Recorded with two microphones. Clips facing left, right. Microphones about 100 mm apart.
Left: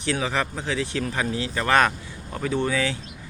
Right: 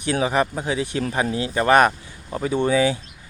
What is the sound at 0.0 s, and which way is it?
Speech, 15° right (ahead or behind).